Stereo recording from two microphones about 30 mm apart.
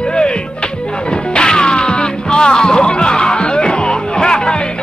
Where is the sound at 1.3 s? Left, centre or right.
Left.